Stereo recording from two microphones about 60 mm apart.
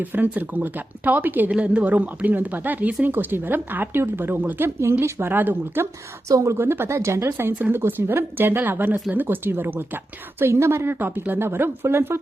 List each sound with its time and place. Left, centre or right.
0.0 s speech: right
1.5 s speech: centre
4.8 s speech: right
5.3 s a woman's voice: right
5.8 s a woman's voice: right
6.6 s a woman's voice: right
6.9 s a woman's voice: right
10.4 s a woman's voice: right